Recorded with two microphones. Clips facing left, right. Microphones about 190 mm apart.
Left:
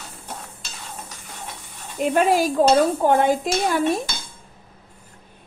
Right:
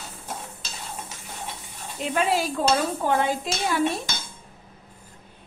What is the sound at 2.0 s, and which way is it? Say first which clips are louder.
Speech: left 6 dB; 50° left (ahead or behind).